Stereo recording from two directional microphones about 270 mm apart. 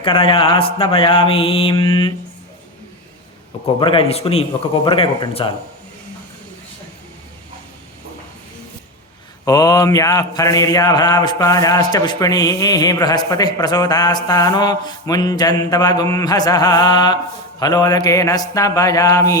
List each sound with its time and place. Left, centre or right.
0.0 s mantra: centre
3.8 s mantra: centre
9.4 s mantra: centre